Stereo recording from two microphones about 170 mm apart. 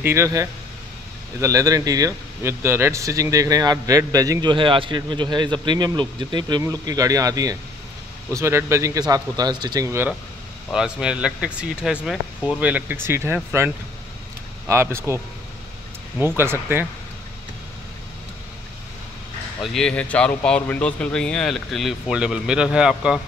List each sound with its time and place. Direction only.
0.0 s speech: 15° right (ahead or behind)
16.2 s speech: 15° right (ahead or behind)
19.6 s speech: 5° left (ahead or behind)